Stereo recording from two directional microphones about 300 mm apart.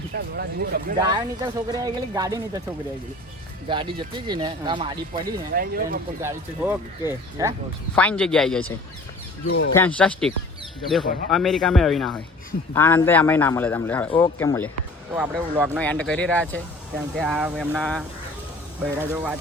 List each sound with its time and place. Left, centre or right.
0.3 s speech: right
1.0 s speech: centre
3.7 s speech: centre
5.5 s speech: right
6.2 s speech: centre
7.9 s speech: centre
9.5 s speech: left
9.7 s speech: centre
15.1 s speech: centre